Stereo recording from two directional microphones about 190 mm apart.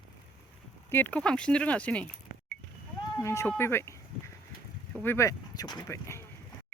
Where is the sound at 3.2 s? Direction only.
15° left (ahead or behind).